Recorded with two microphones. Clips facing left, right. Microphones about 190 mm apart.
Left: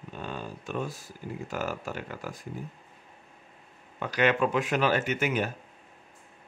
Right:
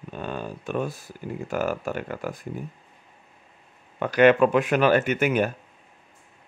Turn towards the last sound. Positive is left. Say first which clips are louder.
# right 6 dB
turn(degrees=-55)  # may be behind; listen again after turning